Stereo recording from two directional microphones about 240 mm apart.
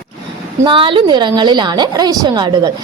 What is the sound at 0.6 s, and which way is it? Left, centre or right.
A woman's voice, right.